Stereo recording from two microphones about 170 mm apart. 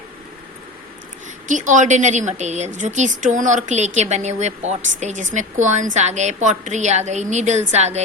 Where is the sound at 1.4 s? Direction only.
45° right (ahead or behind).